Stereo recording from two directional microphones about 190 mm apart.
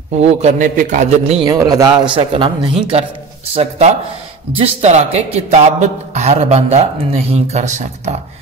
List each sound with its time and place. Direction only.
0.2 s speech: 35° right (ahead or behind)
1.5 s speech: 15° right (ahead or behind); by 8.2 s 35° right (ahead or behind)